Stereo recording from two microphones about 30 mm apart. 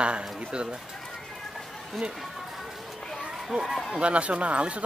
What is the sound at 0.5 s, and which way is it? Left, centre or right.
Speech, right.